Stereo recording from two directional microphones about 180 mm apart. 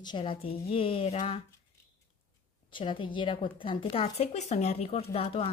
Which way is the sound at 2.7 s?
25° left (ahead or behind).